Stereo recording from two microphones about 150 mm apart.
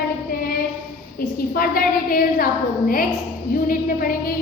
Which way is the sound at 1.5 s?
70° left (ahead or behind).